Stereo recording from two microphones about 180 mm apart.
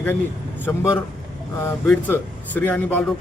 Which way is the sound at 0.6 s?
10° left (ahead or behind).